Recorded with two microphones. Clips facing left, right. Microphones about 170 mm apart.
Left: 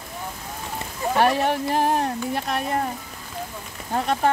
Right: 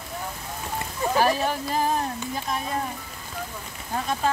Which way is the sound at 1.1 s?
65° left (ahead or behind).